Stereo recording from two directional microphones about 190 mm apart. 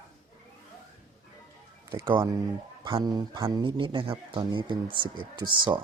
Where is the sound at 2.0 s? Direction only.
15° right (ahead or behind).